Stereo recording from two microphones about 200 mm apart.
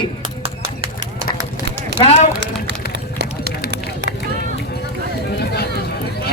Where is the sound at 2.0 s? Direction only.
25° left (ahead or behind).